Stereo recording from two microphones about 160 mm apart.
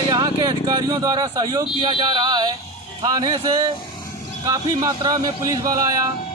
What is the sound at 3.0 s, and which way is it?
Speech, 25° right (ahead or behind).